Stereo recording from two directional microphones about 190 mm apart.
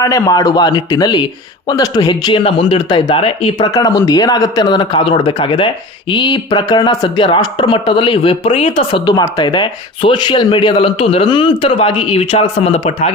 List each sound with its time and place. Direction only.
0.0 s speech: 20° left (ahead or behind)